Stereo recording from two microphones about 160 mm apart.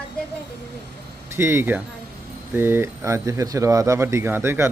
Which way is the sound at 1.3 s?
15° right (ahead or behind).